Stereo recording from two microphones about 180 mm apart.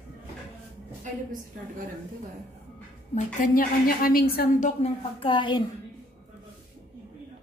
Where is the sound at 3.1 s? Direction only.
50° left (ahead or behind).